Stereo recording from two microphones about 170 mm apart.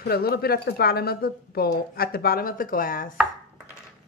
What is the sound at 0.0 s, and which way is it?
A woman's voice, 65° left (ahead or behind).